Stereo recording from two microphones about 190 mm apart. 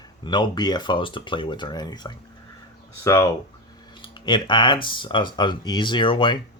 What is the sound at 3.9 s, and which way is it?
Speech, 25° left (ahead or behind).